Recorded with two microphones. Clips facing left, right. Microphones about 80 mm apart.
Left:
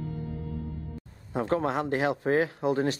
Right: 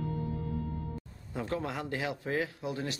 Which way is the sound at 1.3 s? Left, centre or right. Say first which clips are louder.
Left 8 dB; left.